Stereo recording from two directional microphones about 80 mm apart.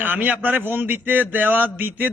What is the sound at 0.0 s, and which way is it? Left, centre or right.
A man's voice, right.